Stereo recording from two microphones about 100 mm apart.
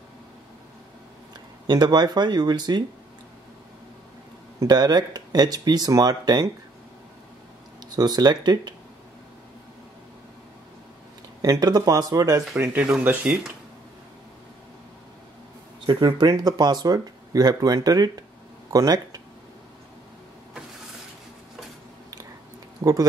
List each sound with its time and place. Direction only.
1.3 s speech: 45° right (ahead or behind)
4.6 s speech: 40° right (ahead or behind)
7.8 s speech: 45° right (ahead or behind)
11.4 s speech: 40° right (ahead or behind)
12.5 s speech: 20° right (ahead or behind)
15.8 s speech: 50° right (ahead or behind)
22.8 s speech: 45° right (ahead or behind)